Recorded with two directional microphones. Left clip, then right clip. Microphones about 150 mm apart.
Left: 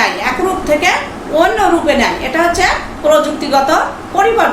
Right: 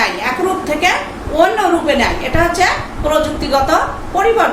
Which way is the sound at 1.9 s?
15° left (ahead or behind).